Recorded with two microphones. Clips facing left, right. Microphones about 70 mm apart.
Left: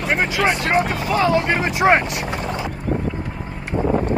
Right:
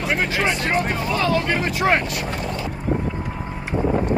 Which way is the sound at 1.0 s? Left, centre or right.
Left.